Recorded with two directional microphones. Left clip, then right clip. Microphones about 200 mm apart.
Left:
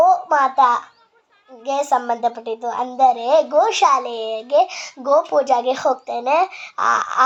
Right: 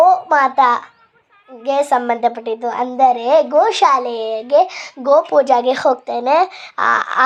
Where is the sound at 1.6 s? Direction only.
20° right (ahead or behind).